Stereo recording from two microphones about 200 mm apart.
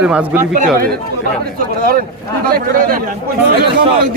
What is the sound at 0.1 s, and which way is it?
Speech, 5° right (ahead or behind).